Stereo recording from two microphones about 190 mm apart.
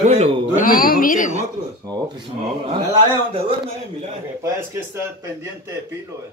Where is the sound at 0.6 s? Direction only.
50° left (ahead or behind).